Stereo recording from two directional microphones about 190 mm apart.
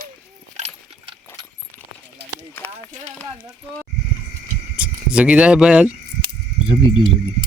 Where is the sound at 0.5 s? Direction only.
30° right (ahead or behind).